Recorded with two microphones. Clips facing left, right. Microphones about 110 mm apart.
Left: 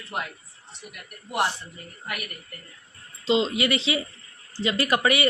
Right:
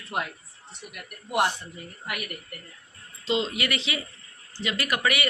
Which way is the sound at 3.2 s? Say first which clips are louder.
Left 4 dB; 25° left (ahead or behind).